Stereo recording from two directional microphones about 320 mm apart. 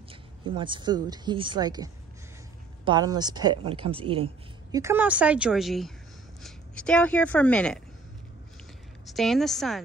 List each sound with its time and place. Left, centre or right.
0.1 s a woman's voice: centre
9.0 s a woman's voice: centre